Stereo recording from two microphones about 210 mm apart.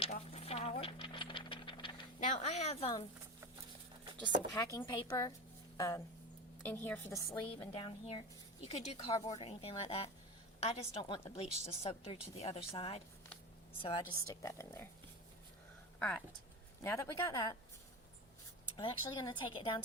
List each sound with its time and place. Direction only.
0.3 s a sound: 30° left (ahead or behind)
4.5 s speech: 15° left (ahead or behind)
7.3 s a woman's voice: 25° left (ahead or behind)
16.0 s speech: 5° left (ahead or behind)
18.8 s a woman's voice: 20° left (ahead or behind)